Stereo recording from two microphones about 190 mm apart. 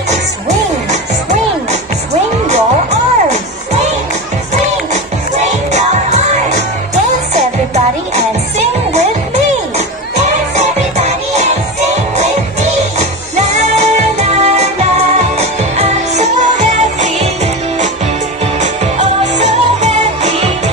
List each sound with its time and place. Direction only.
2.4 s music: 35° right (ahead or behind)
5.7 s music: 35° right (ahead or behind)
11.1 s music: 35° right (ahead or behind)
18.6 s music: 40° right (ahead or behind)